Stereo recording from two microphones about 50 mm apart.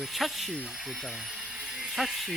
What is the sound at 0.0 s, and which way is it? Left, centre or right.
Speech, centre.